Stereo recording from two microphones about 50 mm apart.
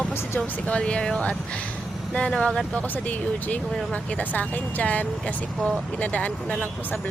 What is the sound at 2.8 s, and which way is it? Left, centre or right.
Speech, left.